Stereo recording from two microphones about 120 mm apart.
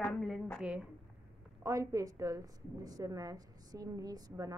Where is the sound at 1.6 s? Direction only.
25° right (ahead or behind).